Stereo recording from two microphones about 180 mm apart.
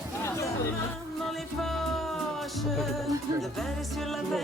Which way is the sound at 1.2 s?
Centre (ahead or behind).